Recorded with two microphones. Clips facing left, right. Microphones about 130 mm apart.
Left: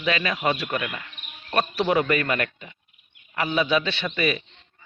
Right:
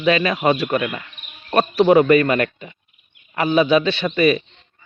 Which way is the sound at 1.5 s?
35° right (ahead or behind).